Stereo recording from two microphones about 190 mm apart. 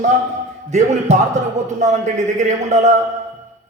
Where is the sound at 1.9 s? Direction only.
40° right (ahead or behind).